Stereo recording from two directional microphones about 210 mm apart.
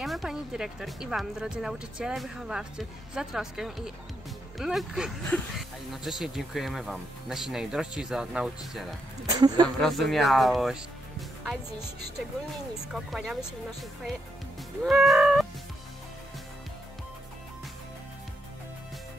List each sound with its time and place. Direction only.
0.0 s speech: centre (ahead or behind)
9.2 s a sound: 20° right (ahead or behind)
9.8 s speech: centre (ahead or behind)
12.8 s speech: centre (ahead or behind)
14.8 s music: centre (ahead or behind)